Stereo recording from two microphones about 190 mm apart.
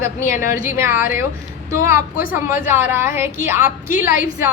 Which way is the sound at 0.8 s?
10° right (ahead or behind).